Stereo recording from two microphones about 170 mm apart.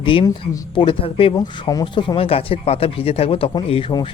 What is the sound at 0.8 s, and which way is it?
Speech, 30° left (ahead or behind).